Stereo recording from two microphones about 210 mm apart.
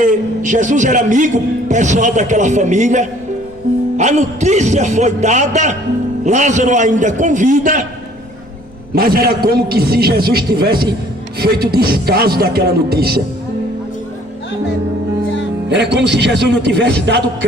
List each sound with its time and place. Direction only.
0.0 s a man's voice: 35° right (ahead or behind)
9.0 s speech: 45° right (ahead or behind)
15.7 s a man's voice: 55° right (ahead or behind)